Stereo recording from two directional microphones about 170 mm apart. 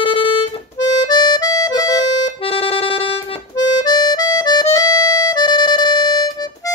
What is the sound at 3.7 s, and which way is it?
Music, 25° left (ahead or behind).